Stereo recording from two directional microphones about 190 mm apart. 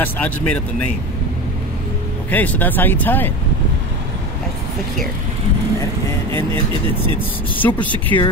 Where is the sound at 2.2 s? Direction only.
10° left (ahead or behind).